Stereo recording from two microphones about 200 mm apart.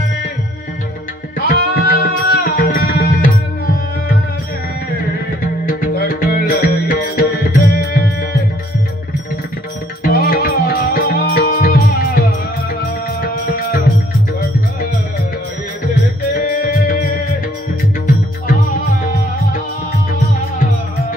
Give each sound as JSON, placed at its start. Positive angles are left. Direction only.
{"t": 1.4, "sound": "music", "side_deg": 50}
{"t": 5.7, "sound": "music", "side_deg": 45}
{"t": 10.0, "sound": "music", "side_deg": 50}
{"t": 16.3, "sound": "music", "side_deg": 45}